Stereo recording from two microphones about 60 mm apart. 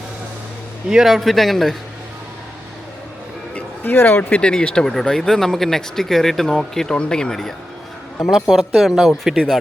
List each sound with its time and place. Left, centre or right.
0.9 s speech: centre
3.5 s a sound: left
4.4 s speech: centre
8.3 s speech: centre